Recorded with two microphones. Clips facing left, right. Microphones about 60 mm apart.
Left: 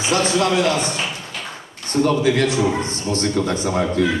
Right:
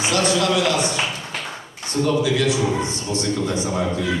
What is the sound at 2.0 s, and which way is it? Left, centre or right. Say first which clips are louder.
A man's voice: left 2 dB; left.